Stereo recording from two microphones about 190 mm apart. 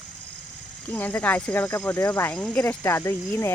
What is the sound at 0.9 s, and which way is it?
Speech, 10° left (ahead or behind).